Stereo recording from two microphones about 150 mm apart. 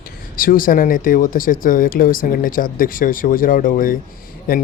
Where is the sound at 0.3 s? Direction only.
70° left (ahead or behind).